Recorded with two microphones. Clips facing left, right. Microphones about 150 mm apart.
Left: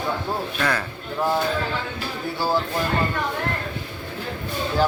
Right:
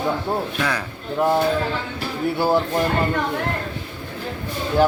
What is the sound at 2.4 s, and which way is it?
Speech, 20° right (ahead or behind).